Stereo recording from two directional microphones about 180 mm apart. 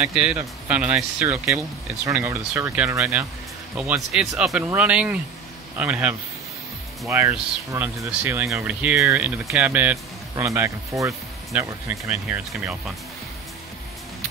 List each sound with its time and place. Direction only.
0.1 s speech: 5° right (ahead or behind)